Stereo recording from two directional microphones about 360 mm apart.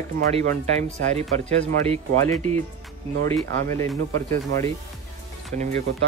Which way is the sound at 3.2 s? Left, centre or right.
Centre.